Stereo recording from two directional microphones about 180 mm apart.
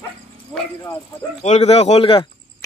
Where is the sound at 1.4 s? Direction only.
40° left (ahead or behind).